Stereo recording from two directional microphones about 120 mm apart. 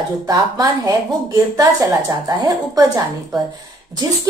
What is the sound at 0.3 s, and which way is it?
A woman's voice, 35° right (ahead or behind).